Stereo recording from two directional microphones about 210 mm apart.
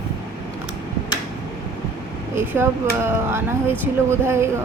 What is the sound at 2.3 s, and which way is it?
Speech, 10° right (ahead or behind).